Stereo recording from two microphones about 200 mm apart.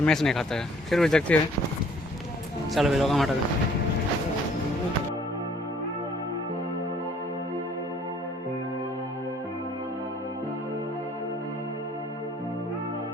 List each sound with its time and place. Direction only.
0.0 s speech: centre (ahead or behind)
2.7 s speech: centre (ahead or behind)